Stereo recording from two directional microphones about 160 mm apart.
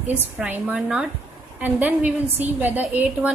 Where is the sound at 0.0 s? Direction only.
10° right (ahead or behind).